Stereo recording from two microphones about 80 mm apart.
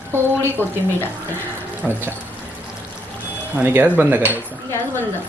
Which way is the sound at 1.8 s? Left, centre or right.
Centre.